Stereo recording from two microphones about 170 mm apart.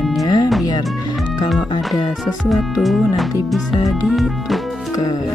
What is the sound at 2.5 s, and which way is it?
Music, centre (ahead or behind).